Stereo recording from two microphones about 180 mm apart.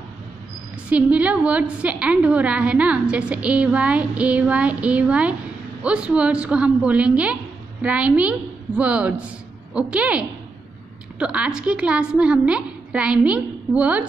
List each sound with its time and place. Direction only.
0.8 s a woman's voice: 5° right (ahead or behind)